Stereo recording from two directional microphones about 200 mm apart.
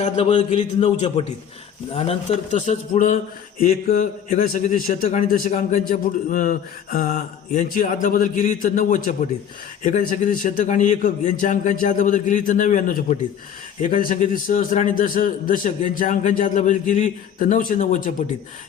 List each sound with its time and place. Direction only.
0.0 s a man's voice: 30° left (ahead or behind)